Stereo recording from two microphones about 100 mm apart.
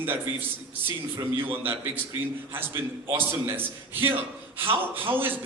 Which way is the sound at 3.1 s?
20° right (ahead or behind).